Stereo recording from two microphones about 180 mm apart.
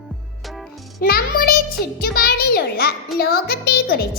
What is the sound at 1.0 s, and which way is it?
A child's voice, 60° left (ahead or behind).